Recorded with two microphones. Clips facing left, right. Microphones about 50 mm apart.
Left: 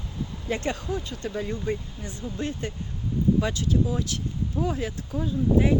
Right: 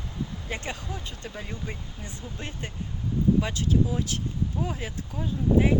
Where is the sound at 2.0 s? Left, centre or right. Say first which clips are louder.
Left 7 dB; right.